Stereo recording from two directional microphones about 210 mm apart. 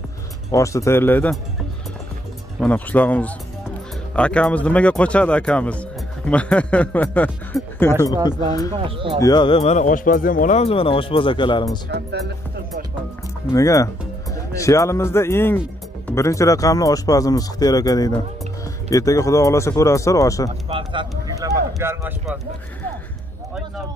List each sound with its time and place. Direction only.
0.5 s speech: 15° left (ahead or behind)
2.6 s speech: 5° left (ahead or behind)
8.7 s speech: 25° right (ahead or behind)
9.2 s speech: 20° left (ahead or behind)
11.9 s speech: 50° right (ahead or behind)
13.5 s speech: 15° left (ahead or behind)
20.7 s a sound: 25° right (ahead or behind)